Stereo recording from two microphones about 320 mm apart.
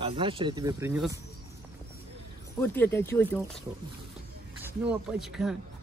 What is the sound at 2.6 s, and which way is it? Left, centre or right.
Speech, centre.